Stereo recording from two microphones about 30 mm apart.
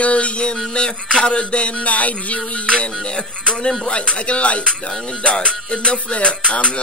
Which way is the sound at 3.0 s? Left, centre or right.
Left.